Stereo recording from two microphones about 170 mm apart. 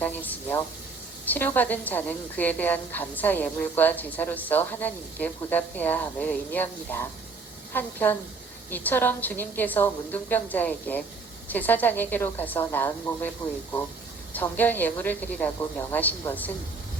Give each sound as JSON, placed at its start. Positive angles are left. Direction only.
{"t": 0.0, "sound": "a woman's voice", "side_deg": 10}
{"t": 14.3, "sound": "a woman's voice", "side_deg": 10}